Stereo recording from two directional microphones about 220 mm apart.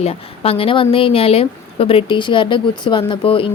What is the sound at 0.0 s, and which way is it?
Speech, 25° left (ahead or behind).